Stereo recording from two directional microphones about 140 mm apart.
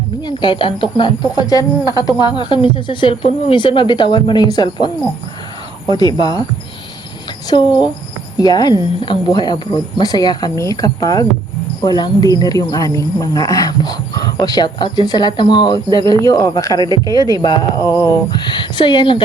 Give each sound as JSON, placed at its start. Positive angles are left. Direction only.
{"t": 0.2, "sound": "speech", "side_deg": 35}
{"t": 5.9, "sound": "speech", "side_deg": 30}
{"t": 7.5, "sound": "speech", "side_deg": 35}